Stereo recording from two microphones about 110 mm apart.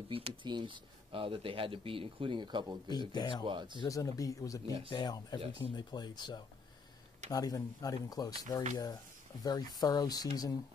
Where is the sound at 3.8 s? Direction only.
30° left (ahead or behind).